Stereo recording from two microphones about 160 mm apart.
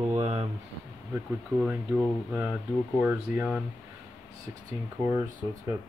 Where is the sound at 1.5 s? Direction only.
5° right (ahead or behind).